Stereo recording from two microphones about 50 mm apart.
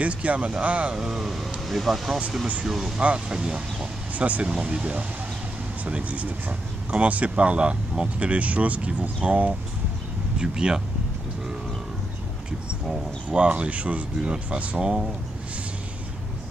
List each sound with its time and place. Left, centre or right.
0.0 s speech: right
0.9 s vehicle: centre
1.7 s speech: centre
2.6 s vehicle: centre
3.0 s speech: right
10.4 s vehicle: centre
13.3 s speech: right
14.8 s vehicle: centre